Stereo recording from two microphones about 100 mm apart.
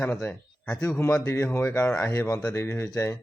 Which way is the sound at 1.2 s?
25° left (ahead or behind).